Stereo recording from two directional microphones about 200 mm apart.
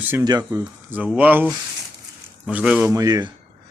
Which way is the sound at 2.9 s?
20° right (ahead or behind).